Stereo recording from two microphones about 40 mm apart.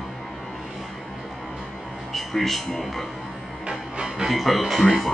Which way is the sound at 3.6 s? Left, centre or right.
Right.